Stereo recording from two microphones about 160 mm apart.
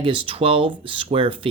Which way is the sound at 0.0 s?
35° right (ahead or behind).